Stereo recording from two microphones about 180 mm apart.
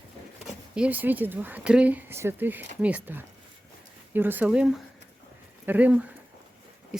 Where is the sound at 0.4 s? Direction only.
5° right (ahead or behind).